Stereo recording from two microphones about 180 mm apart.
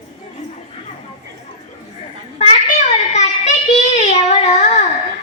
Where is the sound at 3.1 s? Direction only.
40° left (ahead or behind).